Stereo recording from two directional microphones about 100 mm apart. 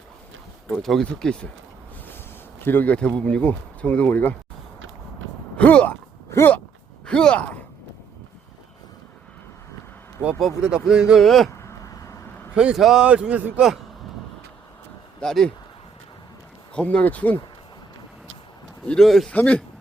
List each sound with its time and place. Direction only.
0.8 s speech: 5° left (ahead or behind)
2.0 s a sound: 20° left (ahead or behind)
3.2 s speech: 10° left (ahead or behind)
5.5 s a sound: 15° left (ahead or behind)
7.0 s sigh: 10° left (ahead or behind)
10.6 s speech: 10° right (ahead or behind)
11.6 s vehicle: 35° left (ahead or behind)
12.5 s speech: 5° right (ahead or behind)
15.2 s a man's voice: 5° left (ahead or behind)
16.7 s speech: 15° left (ahead or behind)
18.9 s a man's voice: 5° left (ahead or behind)
19.3 s speech: 15° left (ahead or behind)